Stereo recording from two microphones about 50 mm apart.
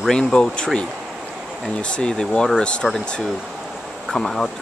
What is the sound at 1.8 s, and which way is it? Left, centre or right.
Speech, centre.